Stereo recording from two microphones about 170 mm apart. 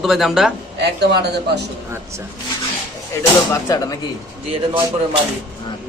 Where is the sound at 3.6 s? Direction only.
20° left (ahead or behind).